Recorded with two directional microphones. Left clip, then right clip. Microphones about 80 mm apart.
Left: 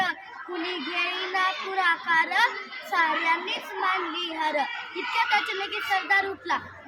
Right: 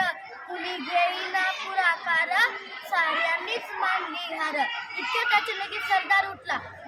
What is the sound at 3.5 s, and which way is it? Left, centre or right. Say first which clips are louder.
A child's voice: even; right.